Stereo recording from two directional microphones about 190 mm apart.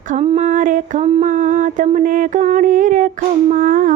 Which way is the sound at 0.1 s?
35° right (ahead or behind).